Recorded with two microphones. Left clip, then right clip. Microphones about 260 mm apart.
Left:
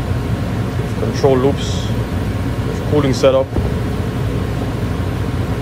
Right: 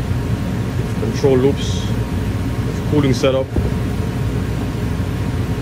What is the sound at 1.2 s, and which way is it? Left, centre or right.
Speech, centre.